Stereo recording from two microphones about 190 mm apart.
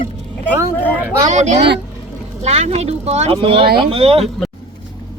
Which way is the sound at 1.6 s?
65° right (ahead or behind).